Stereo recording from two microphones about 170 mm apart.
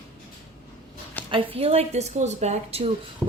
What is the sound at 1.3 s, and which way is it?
A woman's voice, 35° right (ahead or behind).